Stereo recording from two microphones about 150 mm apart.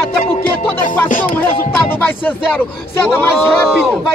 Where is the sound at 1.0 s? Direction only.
65° left (ahead or behind).